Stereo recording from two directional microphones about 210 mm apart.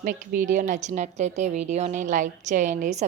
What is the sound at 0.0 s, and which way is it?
Speech, 40° right (ahead or behind).